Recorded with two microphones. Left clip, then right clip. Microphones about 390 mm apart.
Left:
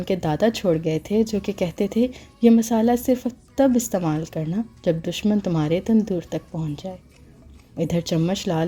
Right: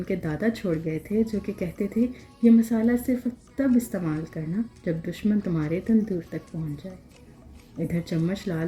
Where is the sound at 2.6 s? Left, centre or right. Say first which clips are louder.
Left 4 dB; left.